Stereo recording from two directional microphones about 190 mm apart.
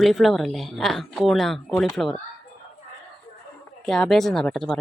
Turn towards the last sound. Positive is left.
turn(degrees=5)  # may be behind; listen again after turning